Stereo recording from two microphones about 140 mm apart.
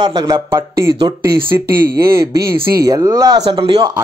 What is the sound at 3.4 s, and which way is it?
Speech, 40° right (ahead or behind).